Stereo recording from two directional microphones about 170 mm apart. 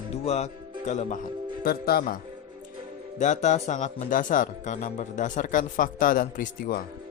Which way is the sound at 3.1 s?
45° left (ahead or behind).